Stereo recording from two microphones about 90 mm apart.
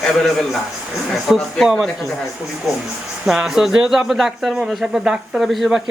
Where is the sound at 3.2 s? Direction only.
5° right (ahead or behind).